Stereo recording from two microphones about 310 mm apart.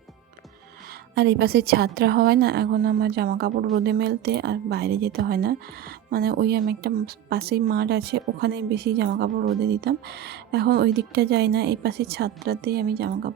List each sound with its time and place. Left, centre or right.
1.1 s speech: right